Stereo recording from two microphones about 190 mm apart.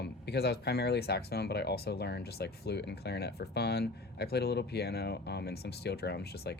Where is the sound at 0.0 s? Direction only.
60° left (ahead or behind).